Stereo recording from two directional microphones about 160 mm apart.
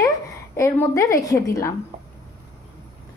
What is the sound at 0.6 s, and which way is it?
A woman's voice, 15° left (ahead or behind).